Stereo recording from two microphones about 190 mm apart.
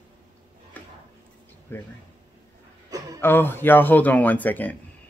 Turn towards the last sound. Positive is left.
turn(degrees=10)  # may be behind; listen again after turning